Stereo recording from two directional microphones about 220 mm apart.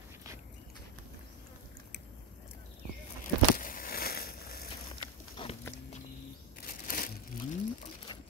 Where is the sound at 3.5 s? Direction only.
40° left (ahead or behind).